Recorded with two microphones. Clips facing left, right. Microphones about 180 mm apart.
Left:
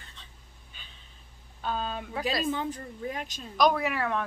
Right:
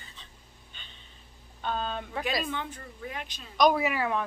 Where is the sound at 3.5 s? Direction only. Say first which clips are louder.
Right 1 dB; centre (ahead or behind).